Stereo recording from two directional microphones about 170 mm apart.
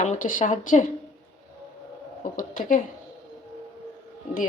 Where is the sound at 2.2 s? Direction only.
50° left (ahead or behind).